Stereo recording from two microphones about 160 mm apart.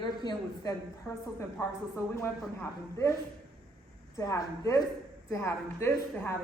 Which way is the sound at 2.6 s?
20° left (ahead or behind).